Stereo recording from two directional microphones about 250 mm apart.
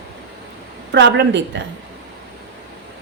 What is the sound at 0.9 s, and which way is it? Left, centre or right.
Speech, right.